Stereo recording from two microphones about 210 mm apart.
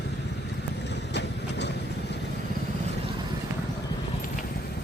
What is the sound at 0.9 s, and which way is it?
Vehicle, 55° left (ahead or behind).